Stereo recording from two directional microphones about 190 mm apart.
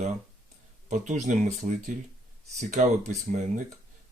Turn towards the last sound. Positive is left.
turn(degrees=-40)  # may be behind; listen again after turning